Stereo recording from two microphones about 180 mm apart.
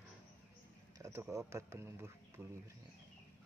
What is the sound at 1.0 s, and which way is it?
Speech, 15° right (ahead or behind).